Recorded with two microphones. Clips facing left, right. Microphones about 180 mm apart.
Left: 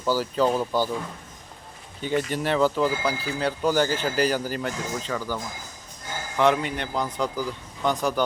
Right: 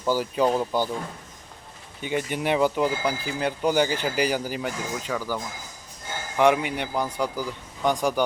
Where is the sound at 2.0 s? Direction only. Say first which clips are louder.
Left 1 dB; 15° right (ahead or behind).